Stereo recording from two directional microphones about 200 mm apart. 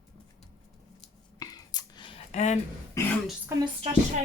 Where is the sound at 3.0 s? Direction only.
15° left (ahead or behind).